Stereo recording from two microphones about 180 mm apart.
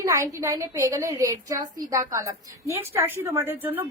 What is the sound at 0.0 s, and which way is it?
A woman's voice, 20° right (ahead or behind).